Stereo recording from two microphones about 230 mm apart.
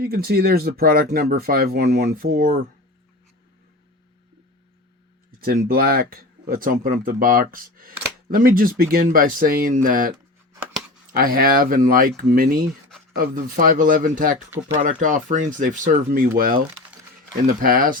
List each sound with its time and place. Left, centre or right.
0.0 s speech: right
5.4 s speech: right
11.1 s speech: right